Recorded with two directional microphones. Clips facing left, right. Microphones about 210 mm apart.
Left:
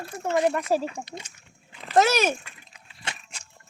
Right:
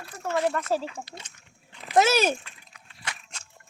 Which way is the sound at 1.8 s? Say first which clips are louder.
Left 1 dB; 15° right (ahead or behind).